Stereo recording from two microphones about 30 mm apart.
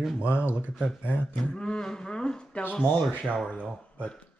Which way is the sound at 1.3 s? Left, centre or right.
Left.